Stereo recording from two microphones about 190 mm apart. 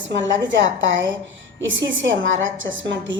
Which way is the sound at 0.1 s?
70° right (ahead or behind).